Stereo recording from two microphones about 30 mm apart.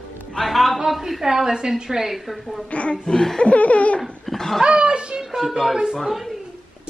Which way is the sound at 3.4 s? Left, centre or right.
Left.